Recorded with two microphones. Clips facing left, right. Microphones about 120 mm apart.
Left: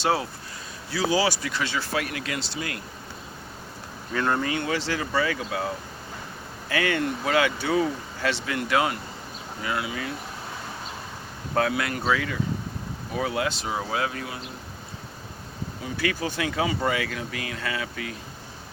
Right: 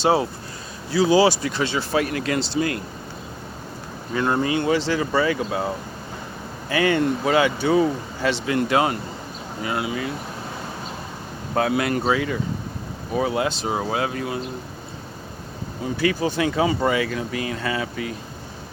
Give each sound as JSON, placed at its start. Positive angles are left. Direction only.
{"t": 0.0, "sound": "speech", "side_deg": -20}
{"t": 2.0, "sound": "speech", "side_deg": -35}
{"t": 4.1, "sound": "speech", "side_deg": -10}
{"t": 4.4, "sound": "speech", "side_deg": -25}
{"t": 11.5, "sound": "speech", "side_deg": -20}
{"t": 15.8, "sound": "speech", "side_deg": -25}